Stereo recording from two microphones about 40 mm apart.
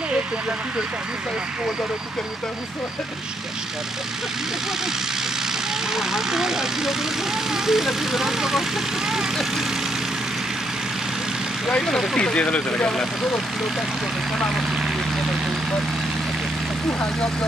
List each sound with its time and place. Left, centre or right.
5.9 s speech: centre
11.8 s speech: centre
12.2 s speech: left